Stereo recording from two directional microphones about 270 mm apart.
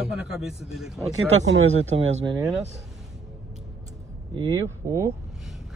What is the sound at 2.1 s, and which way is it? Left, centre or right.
Speech, centre.